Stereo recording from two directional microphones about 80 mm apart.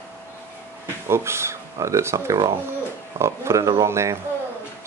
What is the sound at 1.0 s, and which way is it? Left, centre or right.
Speech, right.